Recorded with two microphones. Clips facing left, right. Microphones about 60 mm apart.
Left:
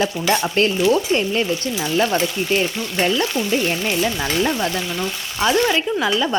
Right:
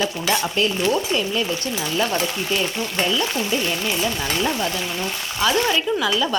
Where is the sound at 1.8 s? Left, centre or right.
Centre.